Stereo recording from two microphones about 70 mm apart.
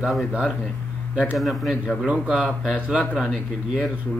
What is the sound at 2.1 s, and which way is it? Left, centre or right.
Speech, centre.